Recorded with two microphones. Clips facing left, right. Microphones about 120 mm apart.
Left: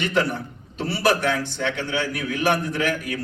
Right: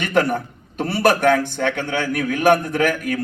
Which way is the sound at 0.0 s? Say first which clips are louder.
Right 4 dB; 50° right (ahead or behind).